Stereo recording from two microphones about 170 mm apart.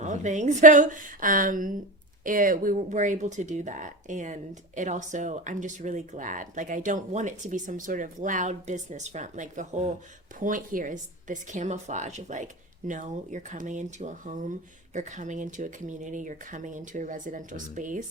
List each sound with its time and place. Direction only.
0.0 s speech: 45° right (ahead or behind)